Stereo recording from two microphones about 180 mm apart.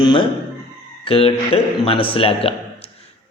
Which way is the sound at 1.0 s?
30° left (ahead or behind).